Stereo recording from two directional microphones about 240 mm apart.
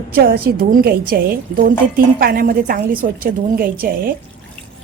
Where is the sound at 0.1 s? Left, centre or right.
Right.